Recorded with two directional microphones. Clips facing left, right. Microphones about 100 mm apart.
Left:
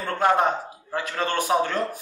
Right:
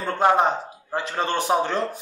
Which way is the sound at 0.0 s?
20° right (ahead or behind).